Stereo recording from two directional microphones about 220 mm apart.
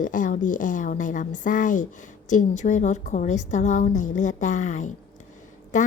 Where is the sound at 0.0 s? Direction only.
35° left (ahead or behind).